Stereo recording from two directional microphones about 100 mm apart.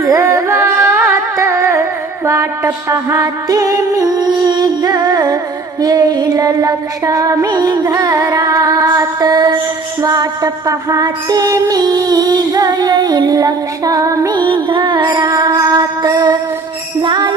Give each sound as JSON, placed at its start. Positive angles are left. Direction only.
{"t": 0.0, "sound": "carnatic music", "side_deg": -35}
{"t": 2.2, "sound": "music", "side_deg": -30}
{"t": 14.3, "sound": "music", "side_deg": -55}